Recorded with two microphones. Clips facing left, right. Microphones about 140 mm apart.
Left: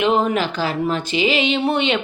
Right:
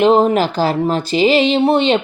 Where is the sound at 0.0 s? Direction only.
35° right (ahead or behind).